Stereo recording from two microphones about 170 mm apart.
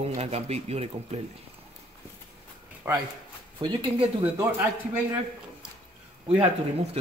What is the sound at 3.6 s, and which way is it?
Speech, 25° right (ahead or behind).